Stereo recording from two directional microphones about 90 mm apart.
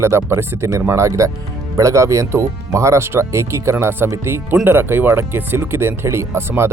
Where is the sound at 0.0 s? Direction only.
30° right (ahead or behind).